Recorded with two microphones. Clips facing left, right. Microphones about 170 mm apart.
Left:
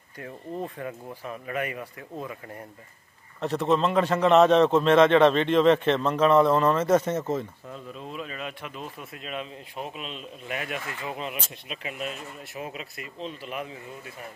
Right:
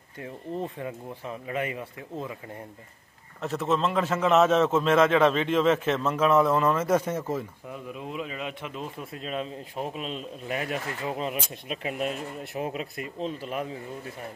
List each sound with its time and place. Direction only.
0.7 s speech: 20° right (ahead or behind)
3.3 s a man's voice: centre (ahead or behind); by 8.7 s 15° right (ahead or behind)
9.1 s speech: 35° right (ahead or behind)